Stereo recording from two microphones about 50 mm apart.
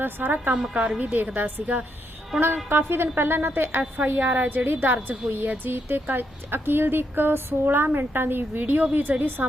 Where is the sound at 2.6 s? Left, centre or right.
Right.